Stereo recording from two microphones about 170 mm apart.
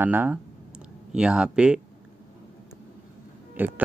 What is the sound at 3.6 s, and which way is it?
Speech, 10° right (ahead or behind).